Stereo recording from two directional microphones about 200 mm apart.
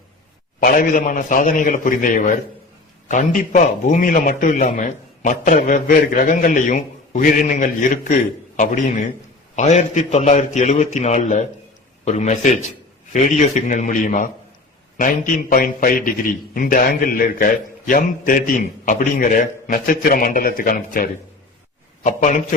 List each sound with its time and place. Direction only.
0.6 s a man's voice: 45° left (ahead or behind)